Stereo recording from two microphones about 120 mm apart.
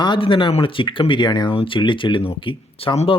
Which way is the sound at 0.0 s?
40° left (ahead or behind).